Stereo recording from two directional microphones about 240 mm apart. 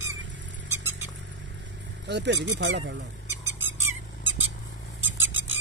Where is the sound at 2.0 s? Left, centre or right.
Right.